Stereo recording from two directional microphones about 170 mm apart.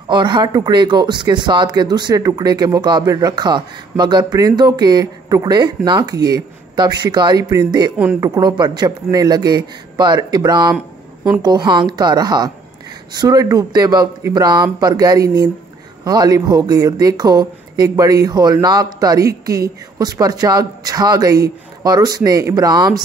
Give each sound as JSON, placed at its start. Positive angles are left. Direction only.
{"t": 0.1, "sound": "speech", "side_deg": -25}
{"t": 8.0, "sound": "speech", "side_deg": -10}
{"t": 8.4, "sound": "speech", "side_deg": -25}